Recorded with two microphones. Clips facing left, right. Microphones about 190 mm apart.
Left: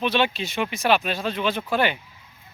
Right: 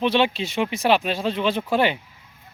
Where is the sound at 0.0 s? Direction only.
25° right (ahead or behind).